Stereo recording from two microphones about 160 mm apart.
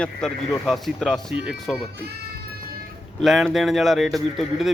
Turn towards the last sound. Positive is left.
turn(degrees=0)  # may be behind; listen again after turning